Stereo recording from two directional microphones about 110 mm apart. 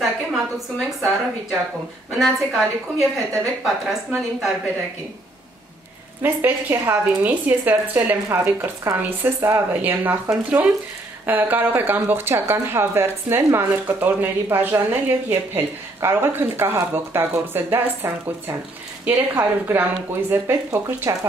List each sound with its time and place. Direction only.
0.0 s a woman's voice: centre (ahead or behind)
2.1 s a woman's voice: centre (ahead or behind)
6.2 s a woman's voice: 20° right (ahead or behind)
21.0 s speech: 30° right (ahead or behind)